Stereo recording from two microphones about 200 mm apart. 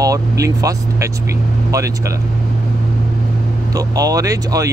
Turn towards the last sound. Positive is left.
turn(degrees=-15)  # may be behind; listen again after turning